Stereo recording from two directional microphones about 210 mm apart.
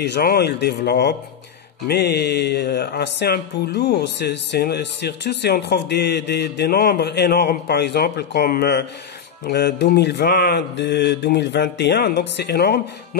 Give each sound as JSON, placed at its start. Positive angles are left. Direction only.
{"t": 0.0, "sound": "speech", "side_deg": 50}